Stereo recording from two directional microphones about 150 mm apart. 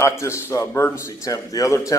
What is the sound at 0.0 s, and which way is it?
Speech, 20° left (ahead or behind).